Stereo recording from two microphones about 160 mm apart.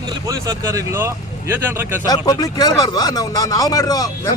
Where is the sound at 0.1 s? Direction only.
20° right (ahead or behind).